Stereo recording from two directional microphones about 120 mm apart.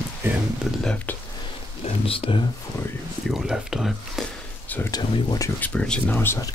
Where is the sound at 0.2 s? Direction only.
20° right (ahead or behind).